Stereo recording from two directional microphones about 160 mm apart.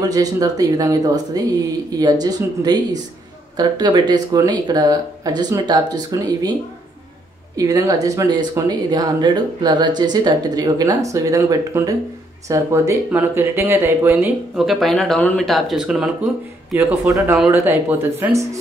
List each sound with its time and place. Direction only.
0.0 s speech: 25° right (ahead or behind)
7.5 s speech: 20° right (ahead or behind)
14.6 s speech: centre (ahead or behind); by 18.6 s 20° right (ahead or behind)